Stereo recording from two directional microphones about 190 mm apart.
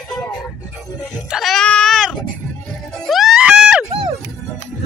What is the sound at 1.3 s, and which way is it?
Goat, centre (ahead or behind).